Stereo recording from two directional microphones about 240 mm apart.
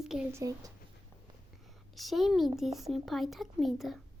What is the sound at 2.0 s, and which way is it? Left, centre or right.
A woman's voice, centre.